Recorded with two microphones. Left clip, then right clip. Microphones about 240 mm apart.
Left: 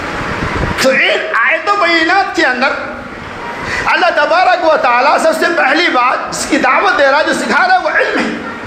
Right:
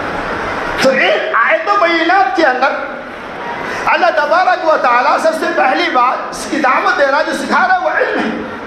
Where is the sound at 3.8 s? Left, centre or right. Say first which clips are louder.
Left 1 dB; left.